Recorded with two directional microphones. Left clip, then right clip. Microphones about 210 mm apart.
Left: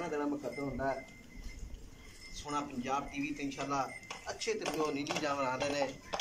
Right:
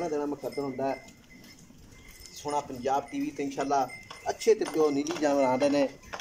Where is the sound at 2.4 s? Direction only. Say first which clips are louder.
Right 8 dB; 35° right (ahead or behind).